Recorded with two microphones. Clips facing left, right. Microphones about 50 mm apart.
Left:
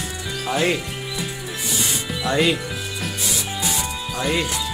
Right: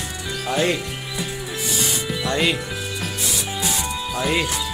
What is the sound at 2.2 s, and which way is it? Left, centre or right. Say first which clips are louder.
Speech: left 2 dB; centre.